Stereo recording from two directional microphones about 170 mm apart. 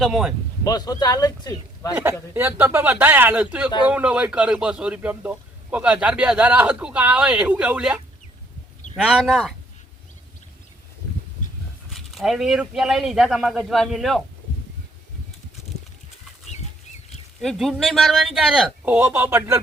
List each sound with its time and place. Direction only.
0.0 s speech: centre (ahead or behind)
0.6 s speech: 20° left (ahead or behind)
2.3 s a man's voice: 15° right (ahead or behind)
11.9 s speech: centre (ahead or behind)
17.4 s speech: centre (ahead or behind); by 19.6 s 15° right (ahead or behind)